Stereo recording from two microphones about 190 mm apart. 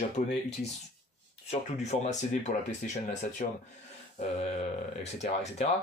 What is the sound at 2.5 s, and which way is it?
Speech, 55° left (ahead or behind).